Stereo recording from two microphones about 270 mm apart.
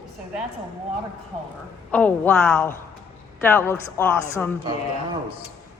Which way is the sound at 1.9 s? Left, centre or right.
Centre.